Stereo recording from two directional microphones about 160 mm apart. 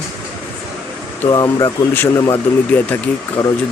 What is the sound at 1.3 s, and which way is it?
Speech, 25° left (ahead or behind).